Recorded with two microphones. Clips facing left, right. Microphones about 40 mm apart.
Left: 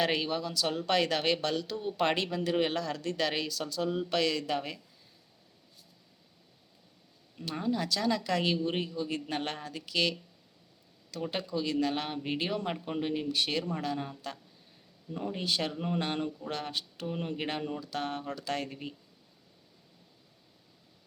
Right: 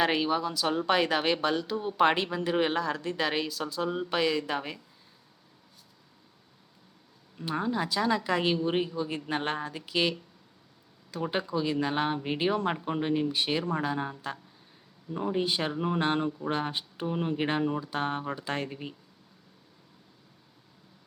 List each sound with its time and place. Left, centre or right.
0.0 s speech: centre
7.4 s speech: centre
18.7 s speech: centre